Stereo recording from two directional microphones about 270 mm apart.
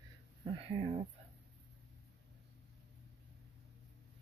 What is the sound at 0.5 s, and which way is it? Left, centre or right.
Speech, centre.